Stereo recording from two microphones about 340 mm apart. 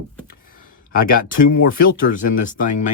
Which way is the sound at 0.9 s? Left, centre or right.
Left.